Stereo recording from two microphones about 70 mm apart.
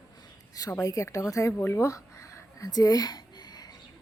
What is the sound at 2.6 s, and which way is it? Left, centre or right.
Speech, left.